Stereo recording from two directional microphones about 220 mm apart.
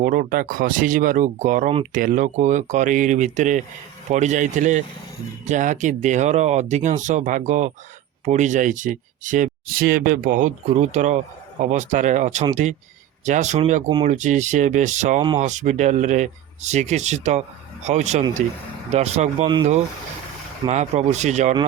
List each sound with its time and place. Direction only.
0.0 s speech: 40° right (ahead or behind)